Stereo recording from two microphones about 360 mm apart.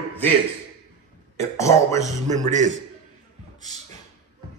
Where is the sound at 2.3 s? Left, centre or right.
Centre.